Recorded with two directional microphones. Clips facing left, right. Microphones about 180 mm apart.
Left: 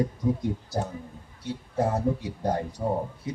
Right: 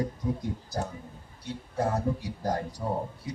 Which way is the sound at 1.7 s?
25° left (ahead or behind).